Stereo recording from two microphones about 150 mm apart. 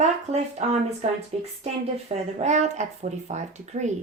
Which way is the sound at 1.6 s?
45° right (ahead or behind).